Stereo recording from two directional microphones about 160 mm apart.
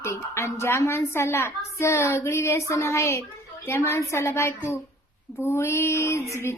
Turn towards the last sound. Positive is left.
turn(degrees=15)  # may be behind; listen again after turning